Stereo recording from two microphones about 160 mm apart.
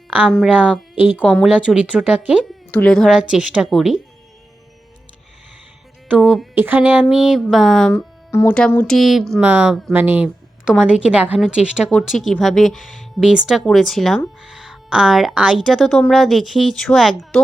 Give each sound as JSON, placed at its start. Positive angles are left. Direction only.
{"t": 0.3, "sound": "a woman's voice", "side_deg": 5}
{"t": 2.7, "sound": "a woman's voice", "side_deg": 5}
{"t": 6.1, "sound": "a woman's voice", "side_deg": 0}
{"t": 6.5, "sound": "a woman's voice", "side_deg": -10}
{"t": 8.3, "sound": "a woman's voice", "side_deg": 15}